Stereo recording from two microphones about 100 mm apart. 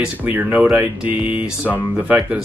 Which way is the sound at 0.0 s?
15° right (ahead or behind).